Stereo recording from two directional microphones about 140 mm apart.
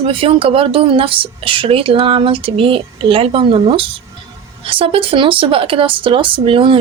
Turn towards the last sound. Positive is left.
turn(degrees=-40)  # may be behind; listen again after turning